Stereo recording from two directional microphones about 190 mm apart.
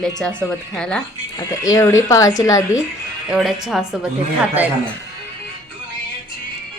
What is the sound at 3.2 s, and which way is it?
Speech, centre (ahead or behind).